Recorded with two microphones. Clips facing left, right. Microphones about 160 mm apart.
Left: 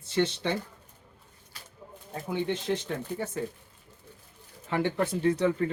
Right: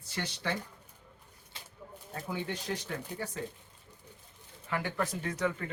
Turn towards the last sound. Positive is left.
turn(degrees=30)  # may be behind; listen again after turning